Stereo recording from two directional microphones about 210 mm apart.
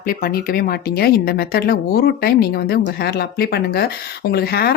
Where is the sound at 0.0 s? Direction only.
45° left (ahead or behind).